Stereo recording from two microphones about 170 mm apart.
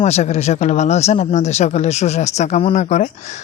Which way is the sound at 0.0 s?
40° left (ahead or behind).